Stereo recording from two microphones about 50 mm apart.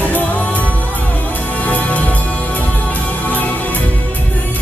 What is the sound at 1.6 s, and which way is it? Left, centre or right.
Music, left.